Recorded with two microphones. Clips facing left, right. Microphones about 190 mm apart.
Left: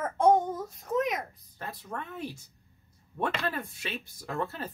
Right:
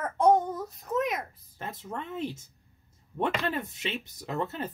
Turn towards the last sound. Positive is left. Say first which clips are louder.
# right 2 dB
turn(degrees=-20)  # may be behind; listen again after turning